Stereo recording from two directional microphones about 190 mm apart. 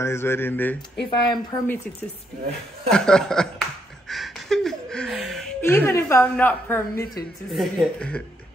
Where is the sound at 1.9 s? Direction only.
5° left (ahead or behind).